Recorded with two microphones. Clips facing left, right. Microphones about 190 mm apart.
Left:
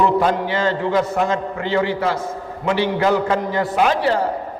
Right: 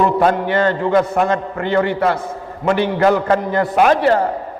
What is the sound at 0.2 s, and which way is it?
A man's voice, 55° right (ahead or behind).